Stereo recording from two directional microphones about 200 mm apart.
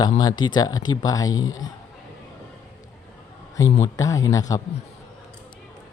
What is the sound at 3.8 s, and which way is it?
Speech, 15° left (ahead or behind).